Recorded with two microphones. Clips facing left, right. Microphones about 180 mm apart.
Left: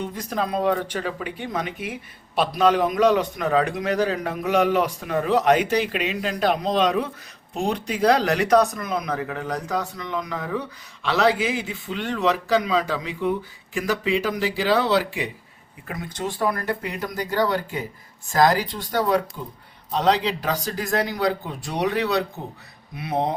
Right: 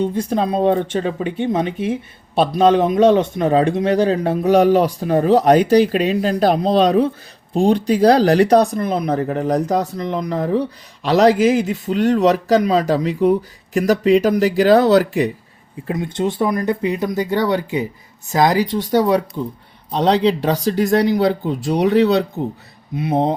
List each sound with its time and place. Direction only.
0.0 s speech: 30° right (ahead or behind)
15.9 s speech: 25° right (ahead or behind)